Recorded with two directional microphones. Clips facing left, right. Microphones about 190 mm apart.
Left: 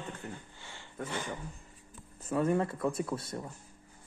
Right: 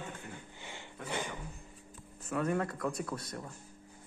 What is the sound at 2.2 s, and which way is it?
Speech, 25° left (ahead or behind).